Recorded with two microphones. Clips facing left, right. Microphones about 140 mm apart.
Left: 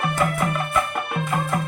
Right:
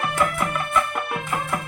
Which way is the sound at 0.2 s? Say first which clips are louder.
Even; 45° left (ahead or behind).